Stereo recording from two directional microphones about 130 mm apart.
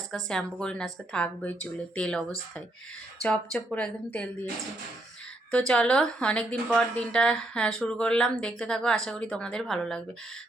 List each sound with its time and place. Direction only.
0.1 s a woman's voice: 5° left (ahead or behind)
3.2 s a woman's voice: 10° left (ahead or behind)
5.5 s a woman's voice: 10° left (ahead or behind)